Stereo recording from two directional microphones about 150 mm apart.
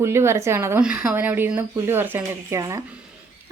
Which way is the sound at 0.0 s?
15° right (ahead or behind).